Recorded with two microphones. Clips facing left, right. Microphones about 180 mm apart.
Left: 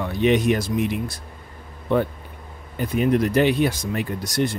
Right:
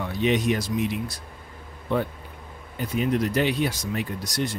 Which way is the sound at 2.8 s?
55° left (ahead or behind).